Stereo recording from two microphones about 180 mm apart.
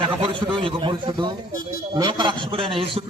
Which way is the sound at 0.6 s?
25° right (ahead or behind).